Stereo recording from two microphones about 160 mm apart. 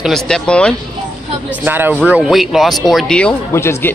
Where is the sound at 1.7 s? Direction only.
10° right (ahead or behind); by 3.3 s 5° left (ahead or behind).